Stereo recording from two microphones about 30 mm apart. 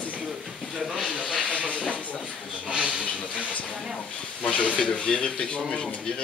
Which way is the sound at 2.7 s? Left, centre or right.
Right.